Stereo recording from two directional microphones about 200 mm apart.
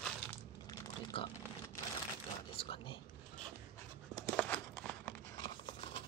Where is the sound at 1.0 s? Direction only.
25° left (ahead or behind).